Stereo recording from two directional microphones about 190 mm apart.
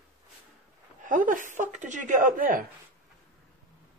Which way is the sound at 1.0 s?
45° right (ahead or behind).